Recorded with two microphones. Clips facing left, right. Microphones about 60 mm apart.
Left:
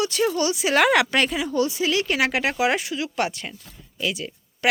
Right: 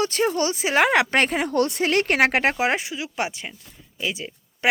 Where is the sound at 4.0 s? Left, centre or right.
Right.